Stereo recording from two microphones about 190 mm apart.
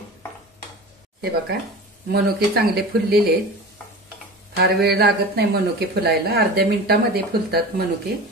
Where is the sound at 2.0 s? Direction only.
60° right (ahead or behind).